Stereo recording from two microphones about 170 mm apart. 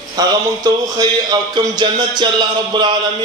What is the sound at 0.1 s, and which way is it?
A man's voice, 20° right (ahead or behind).